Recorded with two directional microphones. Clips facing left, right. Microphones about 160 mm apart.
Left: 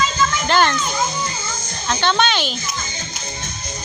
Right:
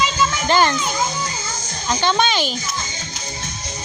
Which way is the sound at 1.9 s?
10° right (ahead or behind).